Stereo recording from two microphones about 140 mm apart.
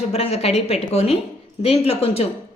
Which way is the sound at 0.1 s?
45° left (ahead or behind).